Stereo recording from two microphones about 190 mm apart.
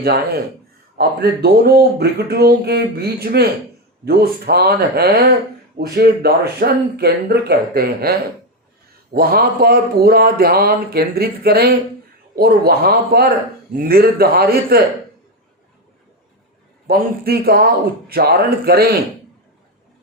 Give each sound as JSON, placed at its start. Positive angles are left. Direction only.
{"t": 0.0, "sound": "speech", "side_deg": -55}
{"t": 16.8, "sound": "speech", "side_deg": -55}